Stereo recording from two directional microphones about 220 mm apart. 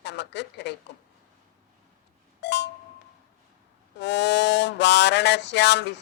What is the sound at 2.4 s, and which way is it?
Speech, 50° left (ahead or behind).